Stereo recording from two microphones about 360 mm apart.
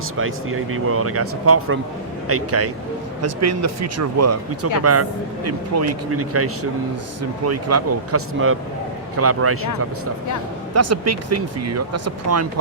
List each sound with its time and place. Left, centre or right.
0.2 s speech: right
10.8 s speech: right